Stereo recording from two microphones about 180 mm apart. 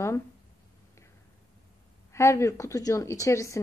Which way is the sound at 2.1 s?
15° left (ahead or behind).